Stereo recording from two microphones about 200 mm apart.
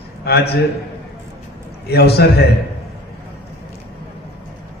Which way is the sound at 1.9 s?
55° left (ahead or behind).